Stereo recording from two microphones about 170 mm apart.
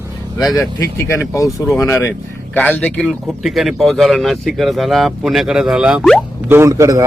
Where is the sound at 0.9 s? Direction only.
15° left (ahead or behind).